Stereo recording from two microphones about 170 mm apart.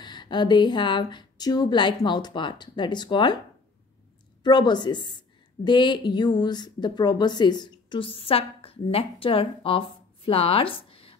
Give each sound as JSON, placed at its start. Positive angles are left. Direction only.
{"t": 0.0, "sound": "a woman's voice", "side_deg": 25}
{"t": 4.4, "sound": "a woman's voice", "side_deg": 25}